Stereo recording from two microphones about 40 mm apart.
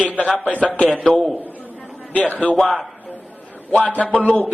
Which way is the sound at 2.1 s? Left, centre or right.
Left.